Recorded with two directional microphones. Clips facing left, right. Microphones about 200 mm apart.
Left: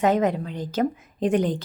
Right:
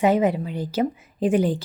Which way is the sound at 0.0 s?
10° right (ahead or behind).